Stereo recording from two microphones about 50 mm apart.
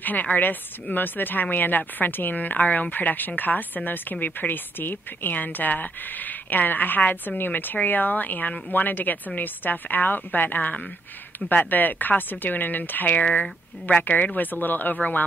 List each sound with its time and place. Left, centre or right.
0.0 s speech: left